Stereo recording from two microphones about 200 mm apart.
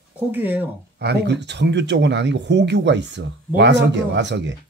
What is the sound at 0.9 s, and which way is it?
Speech, 55° right (ahead or behind).